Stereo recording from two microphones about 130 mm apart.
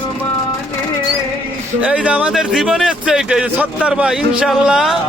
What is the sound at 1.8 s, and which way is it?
Speech, 10° right (ahead or behind).